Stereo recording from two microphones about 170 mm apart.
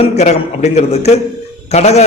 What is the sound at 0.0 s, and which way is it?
A man's voice, 40° left (ahead or behind).